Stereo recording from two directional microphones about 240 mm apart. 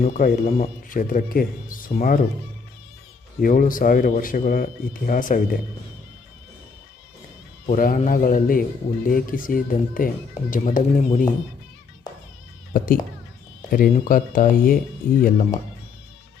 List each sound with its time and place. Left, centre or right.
0.0 s speech: left
3.4 s speech: left
7.7 s speech: left
12.7 s speech: left